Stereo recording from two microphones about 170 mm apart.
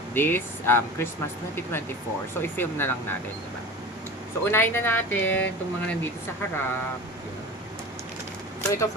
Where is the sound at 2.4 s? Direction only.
10° left (ahead or behind).